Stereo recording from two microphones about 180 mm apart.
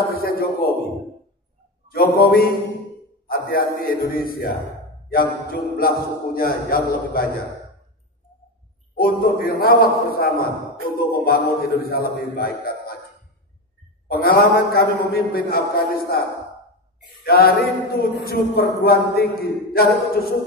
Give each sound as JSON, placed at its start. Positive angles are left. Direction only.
{"t": 0.2, "sound": "a sound", "side_deg": 55}
{"t": 1.9, "sound": "a man's voice", "side_deg": 55}
{"t": 5.5, "sound": "a man's voice", "side_deg": 55}
{"t": 8.9, "sound": "a man's voice", "side_deg": 55}
{"t": 14.1, "sound": "a man's voice", "side_deg": 60}
{"t": 17.2, "sound": "a man's voice", "side_deg": 55}